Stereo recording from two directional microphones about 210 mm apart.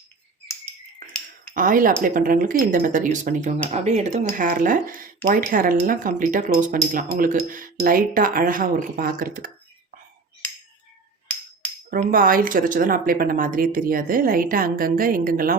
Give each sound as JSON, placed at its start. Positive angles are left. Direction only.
{"t": 1.5, "sound": "speech", "side_deg": -40}
{"t": 11.9, "sound": "speech", "side_deg": -40}